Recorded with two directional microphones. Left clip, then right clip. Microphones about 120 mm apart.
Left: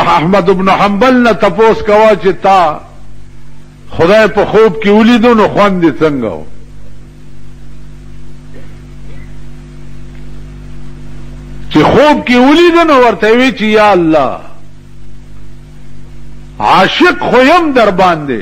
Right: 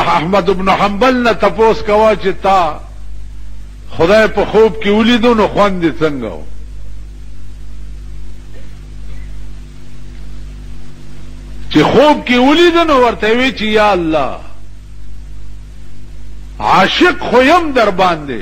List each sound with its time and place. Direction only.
0.0 s a man's voice: 35° right (ahead or behind)
3.9 s a man's voice: 30° right (ahead or behind)
11.7 s a man's voice: 35° right (ahead or behind)
16.5 s a man's voice: 35° right (ahead or behind)